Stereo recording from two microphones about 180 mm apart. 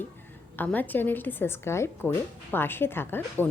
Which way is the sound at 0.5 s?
10° left (ahead or behind).